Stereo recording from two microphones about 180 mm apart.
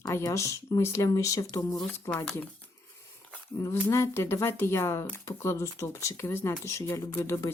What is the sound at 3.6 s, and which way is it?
Speech, 15° left (ahead or behind).